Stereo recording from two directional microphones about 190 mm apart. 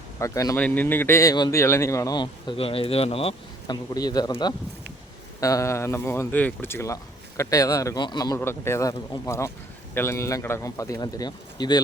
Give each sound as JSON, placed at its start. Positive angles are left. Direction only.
{"t": 0.2, "sound": "a man's voice", "side_deg": 15}